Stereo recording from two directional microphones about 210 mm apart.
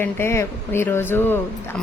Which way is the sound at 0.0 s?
10° left (ahead or behind).